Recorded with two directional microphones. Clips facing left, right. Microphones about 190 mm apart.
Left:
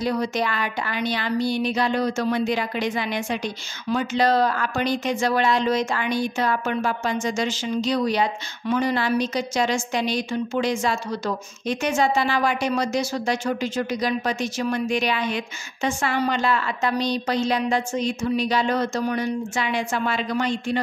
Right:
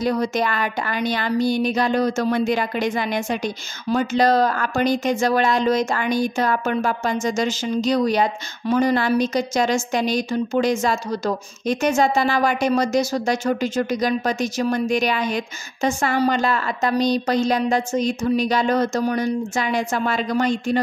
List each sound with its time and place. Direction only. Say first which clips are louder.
0.0 s speech: right 3 dB; 45° right (ahead or behind)